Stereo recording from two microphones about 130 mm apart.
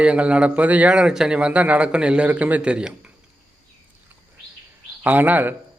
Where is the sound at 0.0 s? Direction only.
10° right (ahead or behind).